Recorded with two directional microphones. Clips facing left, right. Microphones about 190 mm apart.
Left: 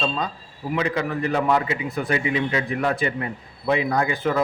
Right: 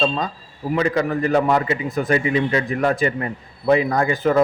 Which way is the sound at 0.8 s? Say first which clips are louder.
Right 4 dB; 45° right (ahead or behind).